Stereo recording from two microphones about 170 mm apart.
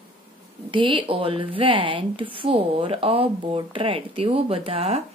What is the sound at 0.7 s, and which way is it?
Speech, 30° right (ahead or behind).